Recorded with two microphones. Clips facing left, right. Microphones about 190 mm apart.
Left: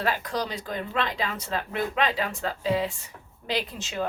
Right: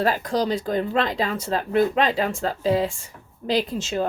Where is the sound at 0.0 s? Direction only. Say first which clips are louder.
Right 6 dB; 40° right (ahead or behind).